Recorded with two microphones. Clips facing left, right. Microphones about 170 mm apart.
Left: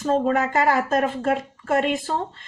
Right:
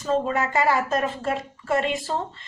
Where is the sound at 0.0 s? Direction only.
50° left (ahead or behind).